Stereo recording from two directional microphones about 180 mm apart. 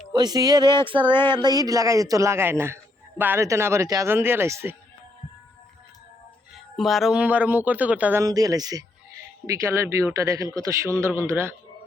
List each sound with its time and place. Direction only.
0.1 s speech: 20° right (ahead or behind)
1.0 s speech: 10° left (ahead or behind)
1.4 s a man's voice: 20° right (ahead or behind)
6.7 s a man's voice: centre (ahead or behind)